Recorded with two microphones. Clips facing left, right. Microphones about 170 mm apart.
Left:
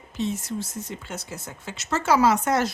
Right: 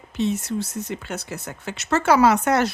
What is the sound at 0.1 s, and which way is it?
Speech, 70° right (ahead or behind).